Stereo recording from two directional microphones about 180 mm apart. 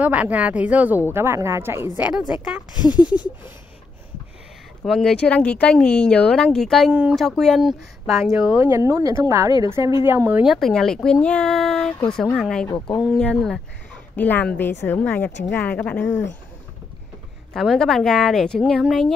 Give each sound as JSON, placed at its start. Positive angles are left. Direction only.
{"t": 0.0, "sound": "a woman's voice", "side_deg": -10}
{"t": 2.7, "sound": "speech", "side_deg": 25}
{"t": 4.8, "sound": "a woman's voice", "side_deg": 0}
{"t": 10.4, "sound": "speech", "side_deg": 0}
{"t": 17.6, "sound": "speech", "side_deg": 0}